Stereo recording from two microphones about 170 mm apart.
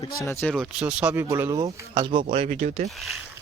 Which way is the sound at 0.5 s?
Centre (ahead or behind).